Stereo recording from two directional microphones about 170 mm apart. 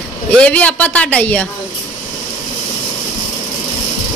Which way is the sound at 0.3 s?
5° left (ahead or behind).